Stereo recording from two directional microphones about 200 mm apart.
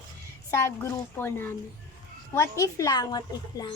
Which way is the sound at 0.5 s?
15° left (ahead or behind).